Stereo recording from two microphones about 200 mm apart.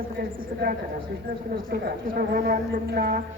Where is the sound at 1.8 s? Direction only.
50° right (ahead or behind).